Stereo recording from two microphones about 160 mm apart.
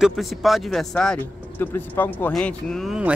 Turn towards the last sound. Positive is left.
turn(degrees=-5)  # may be behind; listen again after turning